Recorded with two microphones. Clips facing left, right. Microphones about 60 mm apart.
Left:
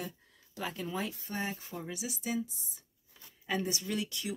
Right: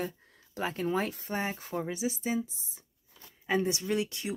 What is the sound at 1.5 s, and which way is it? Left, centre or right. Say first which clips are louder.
Speech: right 7 dB; right.